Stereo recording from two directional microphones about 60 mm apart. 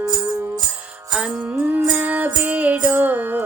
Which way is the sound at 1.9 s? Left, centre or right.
Right.